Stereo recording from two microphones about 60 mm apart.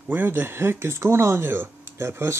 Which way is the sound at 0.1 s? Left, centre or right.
Right.